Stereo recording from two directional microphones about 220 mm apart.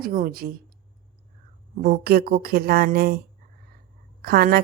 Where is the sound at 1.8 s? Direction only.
45° right (ahead or behind).